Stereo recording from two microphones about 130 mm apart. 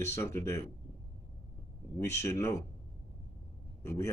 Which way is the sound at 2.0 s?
20° left (ahead or behind).